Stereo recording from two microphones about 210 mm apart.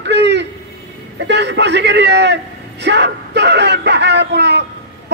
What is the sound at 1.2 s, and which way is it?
A man's voice, 55° right (ahead or behind).